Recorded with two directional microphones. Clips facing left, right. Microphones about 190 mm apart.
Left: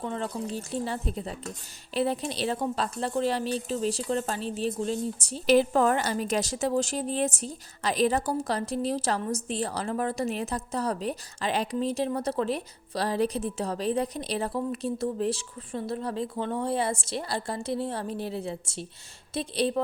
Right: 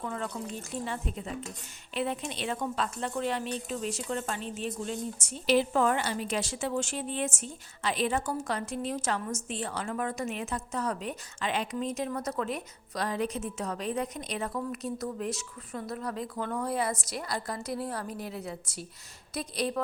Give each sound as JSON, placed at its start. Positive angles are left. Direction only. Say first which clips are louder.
{"t": 0.0, "sound": "a woman's voice", "louder": "left 4 dB", "side_deg": 30}